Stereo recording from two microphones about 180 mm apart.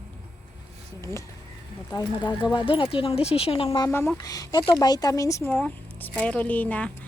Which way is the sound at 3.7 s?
15° left (ahead or behind).